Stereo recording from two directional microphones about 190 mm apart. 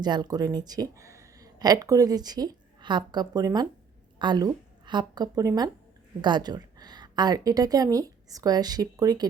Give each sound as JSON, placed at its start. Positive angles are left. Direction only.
{"t": 0.0, "sound": "a woman's voice", "side_deg": -20}